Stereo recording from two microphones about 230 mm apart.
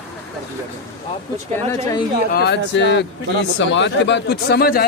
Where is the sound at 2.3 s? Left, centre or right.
Left.